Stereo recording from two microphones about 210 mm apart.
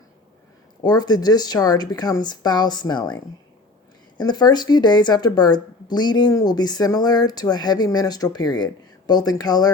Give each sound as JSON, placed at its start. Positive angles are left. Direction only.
{"t": 0.8, "sound": "speech", "side_deg": 20}
{"t": 4.2, "sound": "speech", "side_deg": 20}